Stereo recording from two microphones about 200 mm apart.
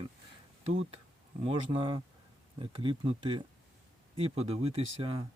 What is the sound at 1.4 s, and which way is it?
Speech, 25° right (ahead or behind).